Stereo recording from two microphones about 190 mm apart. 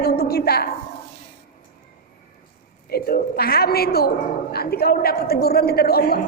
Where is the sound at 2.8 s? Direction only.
55° left (ahead or behind).